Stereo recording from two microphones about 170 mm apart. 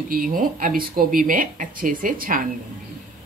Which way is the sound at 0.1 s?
55° right (ahead or behind).